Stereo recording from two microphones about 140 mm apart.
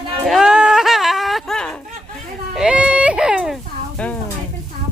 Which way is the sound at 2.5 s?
5° right (ahead or behind).